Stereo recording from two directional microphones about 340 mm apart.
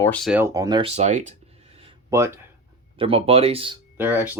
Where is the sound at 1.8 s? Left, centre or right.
Centre.